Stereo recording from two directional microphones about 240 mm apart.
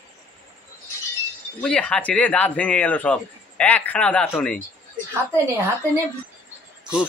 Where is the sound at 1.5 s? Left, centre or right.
Centre.